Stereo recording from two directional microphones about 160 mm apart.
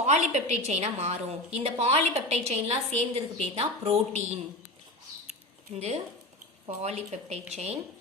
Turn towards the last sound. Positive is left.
turn(degrees=-45)  # may be behind; listen again after turning